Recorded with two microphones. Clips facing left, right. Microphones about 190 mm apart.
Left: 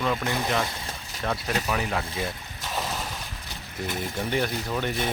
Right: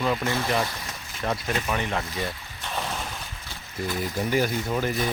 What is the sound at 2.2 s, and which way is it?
Vehicle, 5° left (ahead or behind).